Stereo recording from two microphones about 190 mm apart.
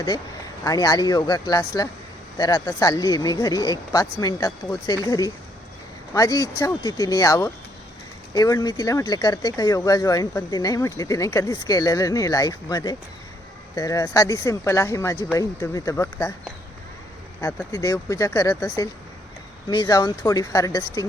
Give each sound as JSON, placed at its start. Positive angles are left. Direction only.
{"t": 0.6, "sound": "speech", "side_deg": 20}
{"t": 17.4, "sound": "speech", "side_deg": 15}